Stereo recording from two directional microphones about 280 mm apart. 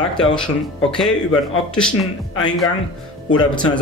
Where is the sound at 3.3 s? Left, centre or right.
Centre.